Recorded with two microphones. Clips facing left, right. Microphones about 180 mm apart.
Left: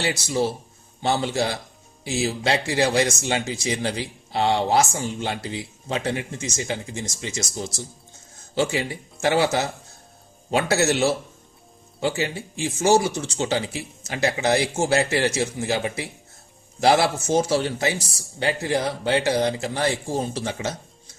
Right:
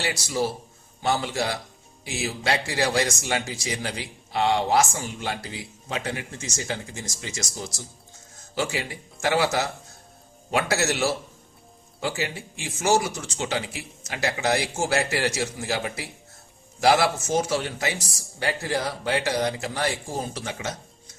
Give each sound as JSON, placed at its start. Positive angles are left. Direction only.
{"t": 0.0, "sound": "speech", "side_deg": 25}